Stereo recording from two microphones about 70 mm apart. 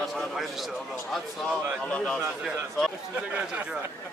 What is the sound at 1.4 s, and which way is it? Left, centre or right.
Speech, centre.